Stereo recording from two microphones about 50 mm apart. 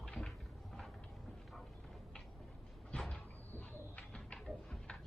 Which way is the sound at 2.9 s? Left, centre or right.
Left.